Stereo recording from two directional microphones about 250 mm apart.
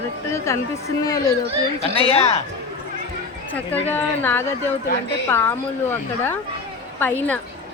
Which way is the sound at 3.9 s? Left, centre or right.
Centre.